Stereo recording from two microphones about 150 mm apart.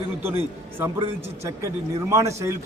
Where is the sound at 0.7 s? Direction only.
15° right (ahead or behind).